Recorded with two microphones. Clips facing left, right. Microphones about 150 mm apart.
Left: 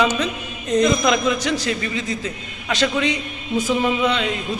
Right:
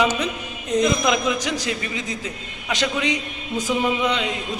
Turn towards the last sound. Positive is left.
turn(degrees=-15)  # may be behind; listen again after turning